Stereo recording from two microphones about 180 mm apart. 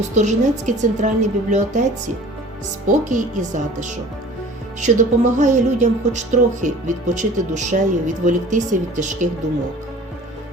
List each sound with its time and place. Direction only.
0.1 s a woman's voice: 40° right (ahead or behind)